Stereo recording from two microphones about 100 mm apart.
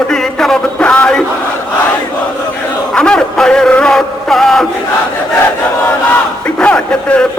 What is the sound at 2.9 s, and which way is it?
Music, 10° left (ahead or behind).